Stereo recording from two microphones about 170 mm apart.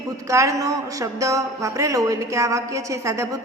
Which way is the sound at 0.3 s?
20° right (ahead or behind).